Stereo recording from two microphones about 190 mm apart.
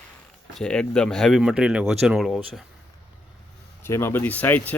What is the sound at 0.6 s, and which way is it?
Speech, 5° left (ahead or behind).